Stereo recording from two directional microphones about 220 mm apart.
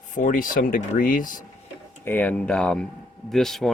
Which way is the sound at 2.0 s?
10° left (ahead or behind).